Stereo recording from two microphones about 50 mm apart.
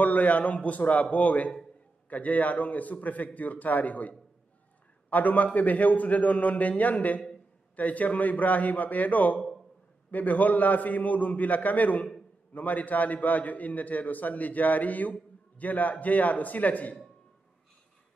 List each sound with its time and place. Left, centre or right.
0.0 s a man's voice: left